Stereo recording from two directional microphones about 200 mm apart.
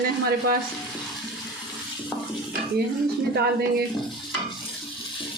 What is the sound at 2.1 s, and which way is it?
Stir, centre (ahead or behind).